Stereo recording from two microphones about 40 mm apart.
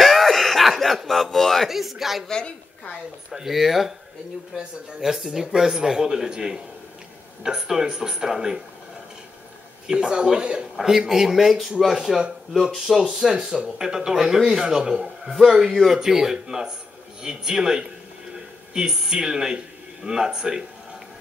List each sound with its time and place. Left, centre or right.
0.0 s a sound: centre
1.7 s speech: centre
3.3 s speech: centre
5.0 s speech: centre
9.8 s a man's voice: right; by 13.4 s centre
13.6 s speech: centre